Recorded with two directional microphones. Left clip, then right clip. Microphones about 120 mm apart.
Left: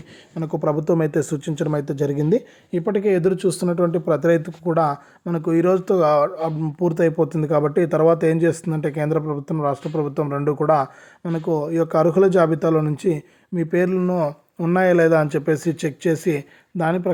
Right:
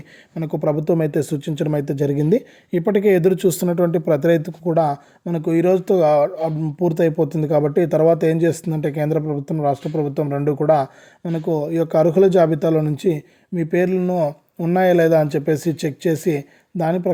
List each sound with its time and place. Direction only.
0.3 s speech: 25° right (ahead or behind)
2.8 s speech: 50° right (ahead or behind); by 17.1 s 30° right (ahead or behind)